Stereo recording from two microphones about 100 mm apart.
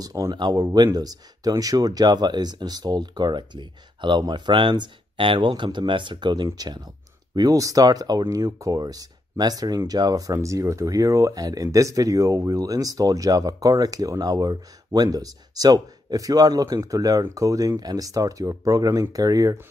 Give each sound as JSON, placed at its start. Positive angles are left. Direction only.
{"t": 0.0, "sound": "speech", "side_deg": -40}
{"t": 7.3, "sound": "speech", "side_deg": -35}